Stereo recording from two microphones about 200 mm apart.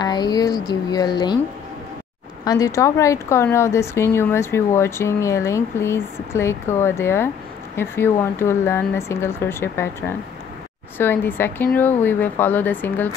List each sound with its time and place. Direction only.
0.0 s speech: 20° left (ahead or behind)
2.4 s speech: 15° left (ahead or behind)